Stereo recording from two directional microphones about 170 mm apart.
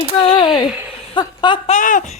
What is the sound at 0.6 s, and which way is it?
Speech, 10° right (ahead or behind).